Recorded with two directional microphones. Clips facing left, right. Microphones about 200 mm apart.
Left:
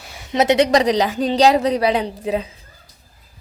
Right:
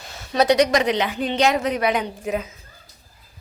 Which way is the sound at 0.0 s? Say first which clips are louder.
Left 1 dB; 10° left (ahead or behind).